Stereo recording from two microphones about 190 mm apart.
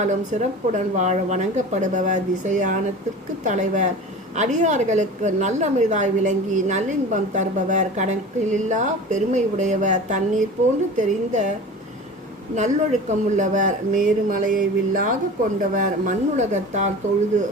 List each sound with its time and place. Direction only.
0.0 s a woman's voice: 40° right (ahead or behind)
12.5 s a woman's voice: 40° right (ahead or behind)